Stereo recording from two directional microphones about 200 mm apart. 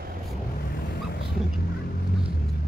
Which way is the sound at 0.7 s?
50° left (ahead or behind).